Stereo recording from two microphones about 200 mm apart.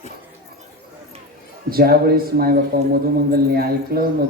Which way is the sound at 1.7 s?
50° right (ahead or behind).